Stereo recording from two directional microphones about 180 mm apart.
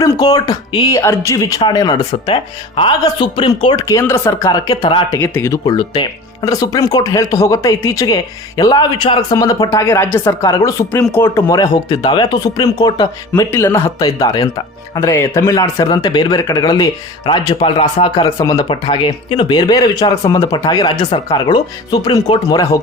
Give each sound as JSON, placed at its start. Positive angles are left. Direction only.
{"t": 0.0, "sound": "a man's voice", "side_deg": 20}
{"t": 5.2, "sound": "a man's voice", "side_deg": 15}